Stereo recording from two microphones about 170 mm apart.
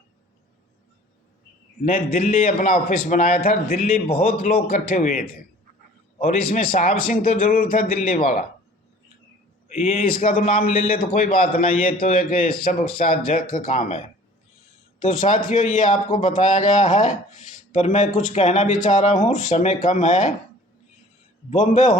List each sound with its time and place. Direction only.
1.8 s a man's voice: 50° left (ahead or behind)
9.6 s a man's voice: 40° left (ahead or behind)
9.9 s a man's voice: 55° left (ahead or behind)
15.0 s a man's voice: 50° left (ahead or behind)
21.5 s a man's voice: 45° left (ahead or behind)